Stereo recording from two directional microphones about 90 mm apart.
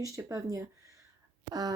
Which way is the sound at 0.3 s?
40° right (ahead or behind).